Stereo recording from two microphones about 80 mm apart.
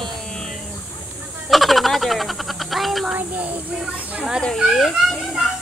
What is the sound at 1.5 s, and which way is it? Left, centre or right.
Speech, centre.